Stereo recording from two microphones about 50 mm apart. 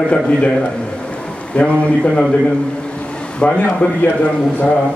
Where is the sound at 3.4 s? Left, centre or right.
Left.